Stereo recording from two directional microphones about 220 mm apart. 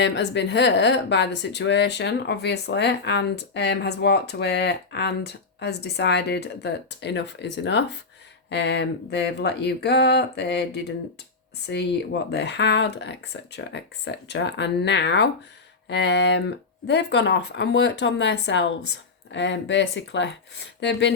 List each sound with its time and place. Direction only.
0.0 s speech: 50° left (ahead or behind)